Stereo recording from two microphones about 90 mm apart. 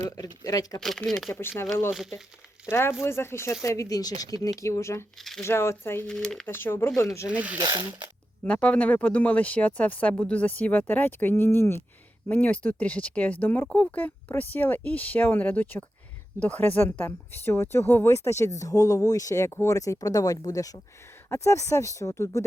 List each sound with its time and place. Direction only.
0.0 s speech: 45° left (ahead or behind)
0.8 s speech: 5° left (ahead or behind)
1.3 s speech: 25° left (ahead or behind)
1.9 s speech: 5° right (ahead or behind)
2.6 s a woman's voice: 30° left (ahead or behind)
5.1 s speech: centre (ahead or behind)
5.4 s speech: 30° left (ahead or behind)
6.1 s speech: 5° left (ahead or behind)
6.4 s a woman's voice: 25° left (ahead or behind)
7.3 s speech: 15° right (ahead or behind)
7.6 s speech: 55° right (ahead or behind)
8.4 s a woman's voice: 15° left (ahead or behind); by 22.4 s 30° left (ahead or behind)